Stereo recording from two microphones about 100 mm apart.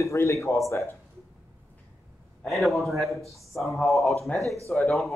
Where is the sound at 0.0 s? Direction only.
30° left (ahead or behind).